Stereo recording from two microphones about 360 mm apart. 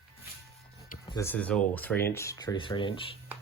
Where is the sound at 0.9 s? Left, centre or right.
Centre.